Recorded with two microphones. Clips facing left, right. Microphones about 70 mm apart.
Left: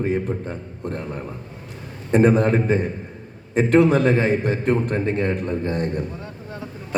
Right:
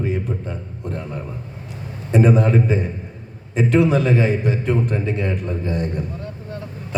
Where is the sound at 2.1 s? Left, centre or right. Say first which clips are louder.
Even; left.